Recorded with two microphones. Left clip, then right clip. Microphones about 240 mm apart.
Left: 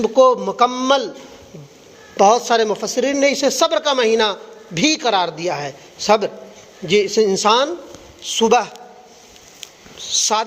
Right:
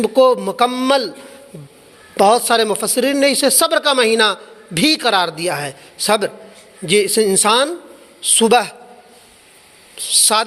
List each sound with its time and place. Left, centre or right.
0.0 s a man's voice: right
2.1 s a man's voice: right
10.0 s a man's voice: right